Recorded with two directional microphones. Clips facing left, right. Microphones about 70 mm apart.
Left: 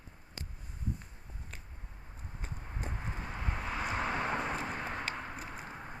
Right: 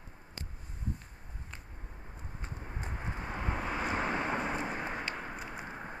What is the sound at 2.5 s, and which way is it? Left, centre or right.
Vehicle, centre.